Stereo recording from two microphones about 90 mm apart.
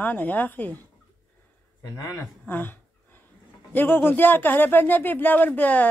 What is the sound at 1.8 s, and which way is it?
Speech, 45° left (ahead or behind).